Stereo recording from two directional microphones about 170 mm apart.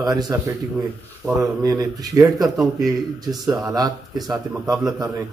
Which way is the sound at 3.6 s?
20° right (ahead or behind).